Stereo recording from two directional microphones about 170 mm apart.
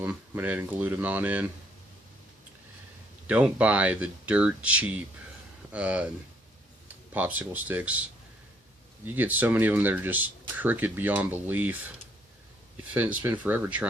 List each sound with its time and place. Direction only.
0.0 s speech: 10° right (ahead or behind)
3.2 s speech: 10° right (ahead or behind)
7.1 s speech: 10° right (ahead or behind)
9.0 s speech: 10° right (ahead or behind)
12.9 s speech: 10° right (ahead or behind)